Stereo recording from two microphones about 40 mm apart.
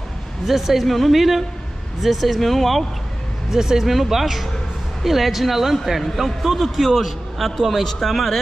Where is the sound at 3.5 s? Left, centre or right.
Centre.